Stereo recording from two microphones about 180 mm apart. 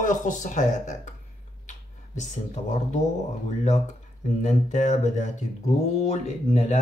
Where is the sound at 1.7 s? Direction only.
40° left (ahead or behind).